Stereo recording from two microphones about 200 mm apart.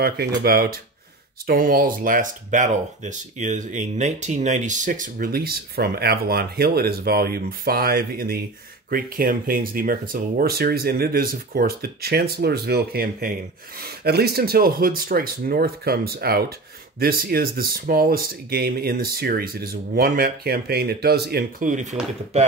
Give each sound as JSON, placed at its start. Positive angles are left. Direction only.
{"t": 0.4, "sound": "speech", "side_deg": -50}